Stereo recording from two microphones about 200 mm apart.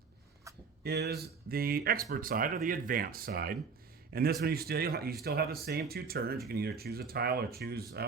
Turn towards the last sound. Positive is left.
turn(degrees=-50)  # may be behind; listen again after turning